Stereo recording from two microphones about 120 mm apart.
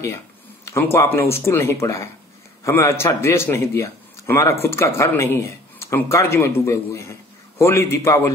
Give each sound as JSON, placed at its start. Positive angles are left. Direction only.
{"t": 0.7, "sound": "speech", "side_deg": 20}